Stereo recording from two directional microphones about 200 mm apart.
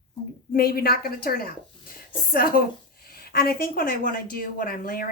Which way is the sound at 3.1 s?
50° left (ahead or behind).